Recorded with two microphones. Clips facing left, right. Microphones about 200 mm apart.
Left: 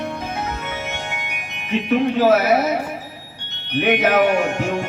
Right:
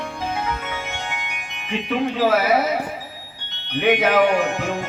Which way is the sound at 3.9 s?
50° left (ahead or behind).